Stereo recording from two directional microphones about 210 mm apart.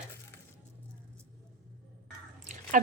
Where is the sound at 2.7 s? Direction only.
40° right (ahead or behind).